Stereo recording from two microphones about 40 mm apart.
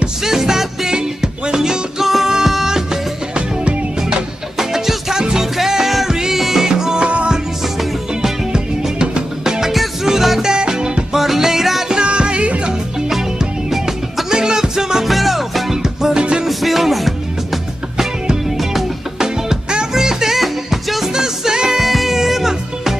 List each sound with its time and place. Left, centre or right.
0.2 s music: centre
2.0 s music: centre
3.3 s music: right
4.6 s music: centre
8.2 s music: centre
9.4 s music: centre
11.1 s music: centre
11.9 s music: right
13.7 s music: centre
15.0 s music: centre
15.8 s music: centre
16.4 s music: centre
19.1 s music: centre
21.7 s music: centre